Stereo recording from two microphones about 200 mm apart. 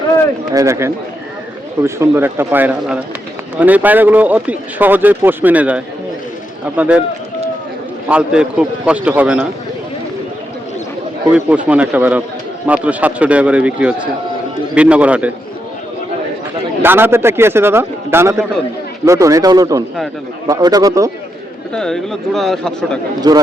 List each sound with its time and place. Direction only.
0.5 s speech: 15° right (ahead or behind)
8.0 s a man's voice: 5° right (ahead or behind)
11.3 s speech: 10° right (ahead or behind)
16.8 s speech: 10° right (ahead or behind)
21.7 s a man's voice: 5° left (ahead or behind)
23.3 s speech: 20° right (ahead or behind)